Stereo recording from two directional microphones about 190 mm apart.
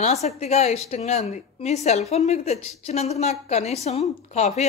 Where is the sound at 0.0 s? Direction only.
35° left (ahead or behind).